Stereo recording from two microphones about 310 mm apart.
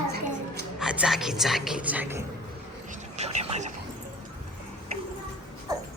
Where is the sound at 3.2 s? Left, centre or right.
Right.